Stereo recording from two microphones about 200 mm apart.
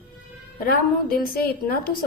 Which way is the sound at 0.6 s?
50° left (ahead or behind).